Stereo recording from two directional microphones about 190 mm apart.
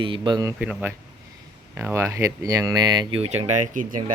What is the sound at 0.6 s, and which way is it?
Speech, 5° right (ahead or behind).